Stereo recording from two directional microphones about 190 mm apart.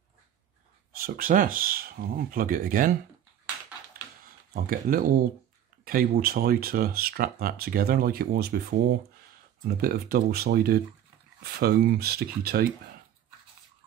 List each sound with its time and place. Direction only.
1.0 s speech: 45° right (ahead or behind)
3.9 s a sound: 50° right (ahead or behind)
4.6 s speech: 50° right (ahead or behind)